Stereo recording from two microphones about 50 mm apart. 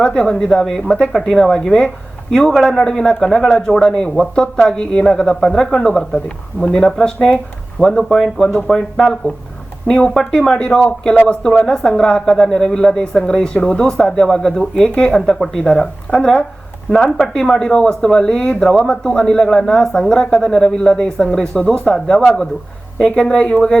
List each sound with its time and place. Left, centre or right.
0.0 s speech: centre
6.1 s speech: centre
9.8 s speech: centre
15.4 s speech: centre